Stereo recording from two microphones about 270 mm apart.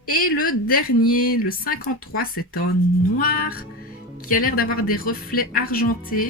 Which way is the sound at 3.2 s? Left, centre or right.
Left.